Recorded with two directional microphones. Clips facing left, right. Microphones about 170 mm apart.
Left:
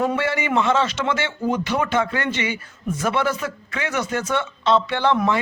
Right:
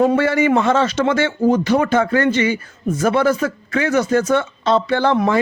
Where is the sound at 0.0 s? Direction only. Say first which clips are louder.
Right 7 dB; 40° right (ahead or behind).